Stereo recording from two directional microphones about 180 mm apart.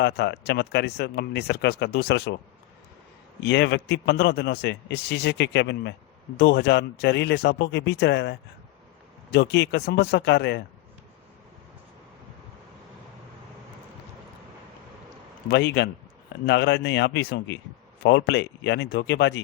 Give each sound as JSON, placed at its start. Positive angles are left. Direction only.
{"t": 0.0, "sound": "speech", "side_deg": 70}
{"t": 3.4, "sound": "a man's voice", "side_deg": 65}
{"t": 15.4, "sound": "a man's voice", "side_deg": 65}